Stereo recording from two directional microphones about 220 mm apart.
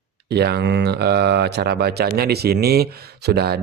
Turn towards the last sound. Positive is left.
turn(degrees=-45)  # may be behind; listen again after turning